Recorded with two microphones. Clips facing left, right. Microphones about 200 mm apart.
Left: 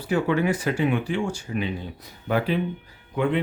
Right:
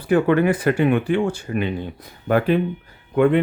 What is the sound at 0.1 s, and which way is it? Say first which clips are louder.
Speech: right 6 dB; 55° right (ahead or behind).